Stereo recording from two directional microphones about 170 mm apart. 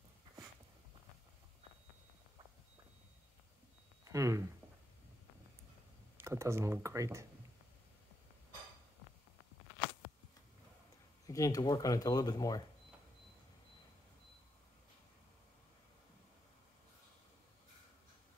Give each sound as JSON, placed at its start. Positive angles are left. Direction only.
{"t": 4.0, "sound": "a sound", "side_deg": -20}
{"t": 6.1, "sound": "speech", "side_deg": -15}
{"t": 11.2, "sound": "speech", "side_deg": 20}